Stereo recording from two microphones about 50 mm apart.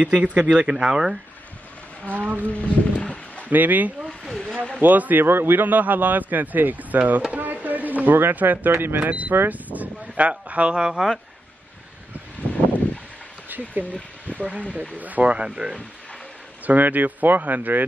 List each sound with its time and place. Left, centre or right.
0.0 s speech: right
0.7 s speech: centre
2.0 s speech: right
2.5 s speech: left
3.4 s speech: right
4.2 s a sound: centre
4.7 s speech: right
5.2 s speech: right
9.0 s speech: right
9.5 s a sound: right
10.5 s speech: right
13.5 s a sound: right
14.3 s speech: right
16.6 s speech: right